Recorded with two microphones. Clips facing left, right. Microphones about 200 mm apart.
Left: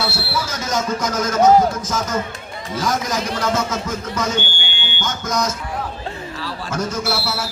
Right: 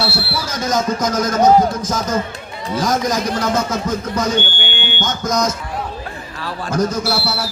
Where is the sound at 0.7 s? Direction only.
40° right (ahead or behind).